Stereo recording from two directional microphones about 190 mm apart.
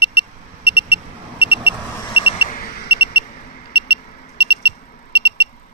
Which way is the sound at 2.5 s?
50° left (ahead or behind).